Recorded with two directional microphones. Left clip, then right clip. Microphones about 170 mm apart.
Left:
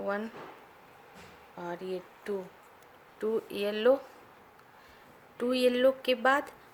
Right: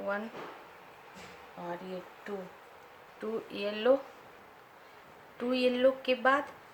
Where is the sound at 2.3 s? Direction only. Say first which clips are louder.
Left 6 dB; 65° left (ahead or behind).